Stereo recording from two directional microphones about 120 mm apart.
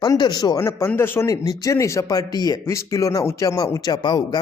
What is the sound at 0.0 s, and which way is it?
Speech, 35° left (ahead or behind).